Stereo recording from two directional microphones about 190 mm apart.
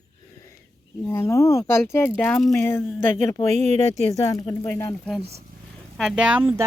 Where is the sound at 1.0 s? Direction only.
15° left (ahead or behind).